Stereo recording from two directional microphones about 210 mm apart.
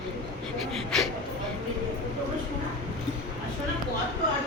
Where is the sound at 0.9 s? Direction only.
Centre (ahead or behind).